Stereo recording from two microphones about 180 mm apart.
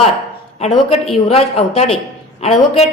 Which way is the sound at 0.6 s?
35° left (ahead or behind).